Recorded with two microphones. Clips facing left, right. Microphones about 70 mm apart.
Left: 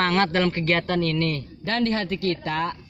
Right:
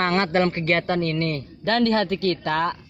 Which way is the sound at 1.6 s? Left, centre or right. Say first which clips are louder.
Right 4 dB; right.